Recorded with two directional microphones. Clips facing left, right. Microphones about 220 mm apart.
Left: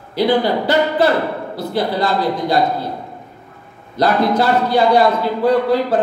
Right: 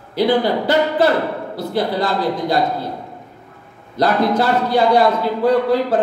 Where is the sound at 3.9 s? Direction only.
50° right (ahead or behind).